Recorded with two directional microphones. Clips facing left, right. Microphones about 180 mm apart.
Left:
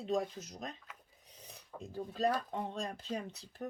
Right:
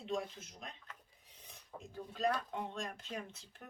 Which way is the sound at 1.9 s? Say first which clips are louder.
Left 3 dB; 35° left (ahead or behind).